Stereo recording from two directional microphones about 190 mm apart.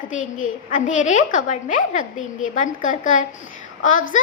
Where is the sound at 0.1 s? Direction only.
40° left (ahead or behind).